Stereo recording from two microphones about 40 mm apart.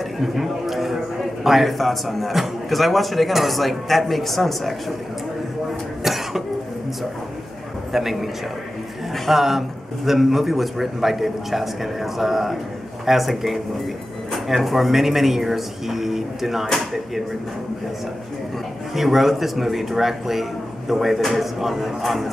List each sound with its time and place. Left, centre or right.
0.2 s speech: centre
6.0 s cough: centre
7.9 s speech: centre
18.9 s speech: centre